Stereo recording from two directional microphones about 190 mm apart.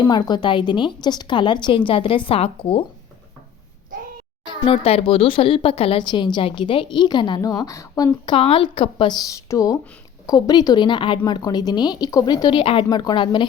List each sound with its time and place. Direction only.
0.1 s speech: 25° left (ahead or behind)
4.4 s speech: 30° left (ahead or behind)